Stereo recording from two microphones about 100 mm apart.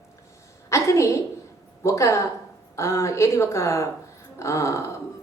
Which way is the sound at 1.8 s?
30° left (ahead or behind).